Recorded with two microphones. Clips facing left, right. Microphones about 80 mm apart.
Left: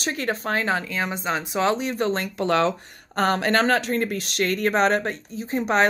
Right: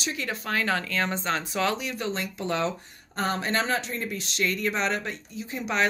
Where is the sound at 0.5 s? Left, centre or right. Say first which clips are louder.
Right 2 dB; left.